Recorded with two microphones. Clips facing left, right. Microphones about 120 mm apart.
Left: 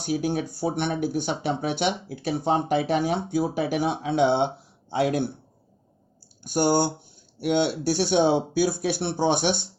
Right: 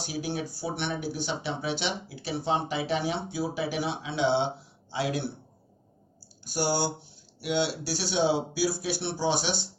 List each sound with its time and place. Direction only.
0.0 s speech: 50° left (ahead or behind)
6.4 s speech: 55° left (ahead or behind)